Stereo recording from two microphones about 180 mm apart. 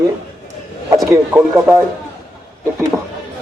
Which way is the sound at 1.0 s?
15° right (ahead or behind).